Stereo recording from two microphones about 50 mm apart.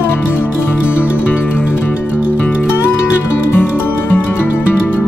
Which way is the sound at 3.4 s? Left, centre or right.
Left.